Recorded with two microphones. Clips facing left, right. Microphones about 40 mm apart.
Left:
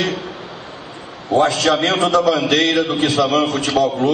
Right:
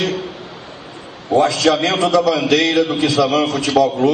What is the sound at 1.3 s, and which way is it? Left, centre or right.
A man's voice, left.